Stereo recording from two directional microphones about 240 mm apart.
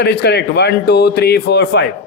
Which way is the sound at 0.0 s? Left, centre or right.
Left.